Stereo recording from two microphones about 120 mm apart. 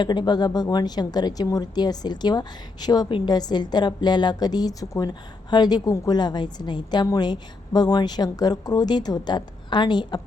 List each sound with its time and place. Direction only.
0.0 s speech: 40° left (ahead or behind)